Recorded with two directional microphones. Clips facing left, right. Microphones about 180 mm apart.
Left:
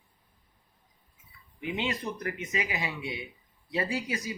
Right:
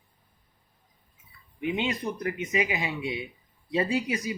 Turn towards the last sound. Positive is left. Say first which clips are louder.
# right 5 dB
turn(degrees=-20)  # may be behind; listen again after turning